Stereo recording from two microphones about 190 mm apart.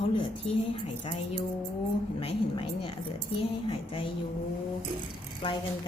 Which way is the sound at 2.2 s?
30° left (ahead or behind).